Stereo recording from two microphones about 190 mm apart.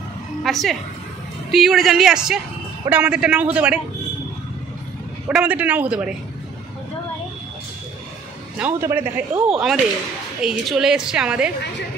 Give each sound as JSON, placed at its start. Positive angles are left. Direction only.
{"t": 0.4, "sound": "a woman's voice", "side_deg": 0}
{"t": 5.3, "sound": "speech", "side_deg": -5}
{"t": 8.5, "sound": "a woman's voice", "side_deg": -10}